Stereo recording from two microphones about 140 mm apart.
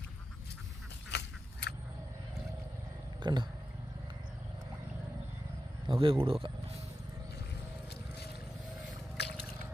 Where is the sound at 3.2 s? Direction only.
30° right (ahead or behind).